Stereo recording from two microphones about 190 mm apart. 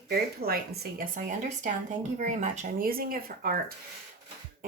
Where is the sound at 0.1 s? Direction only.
55° right (ahead or behind).